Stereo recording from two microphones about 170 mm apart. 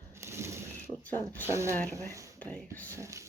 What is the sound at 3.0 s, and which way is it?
Speech, 20° right (ahead or behind).